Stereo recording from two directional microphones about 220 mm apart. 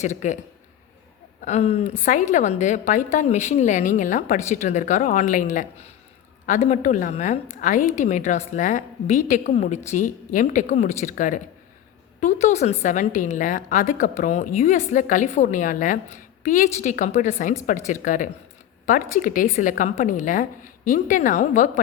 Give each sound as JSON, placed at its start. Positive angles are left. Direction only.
{"t": 0.0, "sound": "a woman's voice", "side_deg": 35}
{"t": 1.5, "sound": "a woman's voice", "side_deg": 30}